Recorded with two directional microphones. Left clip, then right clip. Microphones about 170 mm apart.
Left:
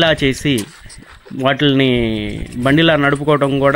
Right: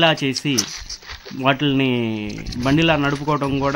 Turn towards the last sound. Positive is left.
turn(degrees=20)  # may be behind; listen again after turning